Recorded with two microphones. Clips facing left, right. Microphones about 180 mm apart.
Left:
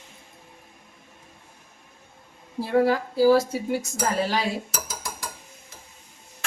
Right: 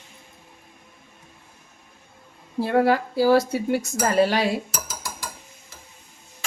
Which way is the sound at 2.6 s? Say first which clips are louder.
Right 2 dB; 65° right (ahead or behind).